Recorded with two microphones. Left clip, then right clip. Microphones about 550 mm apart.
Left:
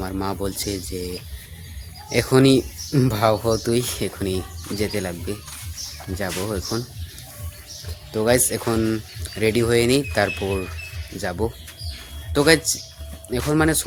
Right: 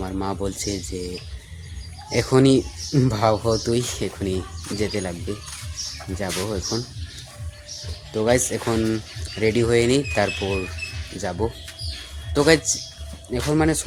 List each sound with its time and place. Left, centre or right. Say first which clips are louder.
0.0 s speech: left 1 dB; left
2.1 s speech: left 1 dB; left
6.1 s speech: left 1 dB; left
8.1 s speech: left 1 dB; left